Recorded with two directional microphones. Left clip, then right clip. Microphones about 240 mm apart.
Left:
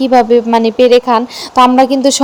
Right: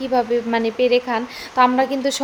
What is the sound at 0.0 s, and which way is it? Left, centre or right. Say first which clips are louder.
A woman's voice: left 11 dB; left.